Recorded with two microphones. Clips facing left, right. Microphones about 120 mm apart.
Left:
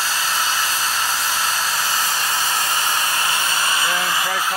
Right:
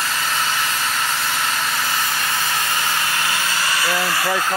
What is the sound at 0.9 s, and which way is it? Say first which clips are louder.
Vehicle: even; 30° left (ahead or behind).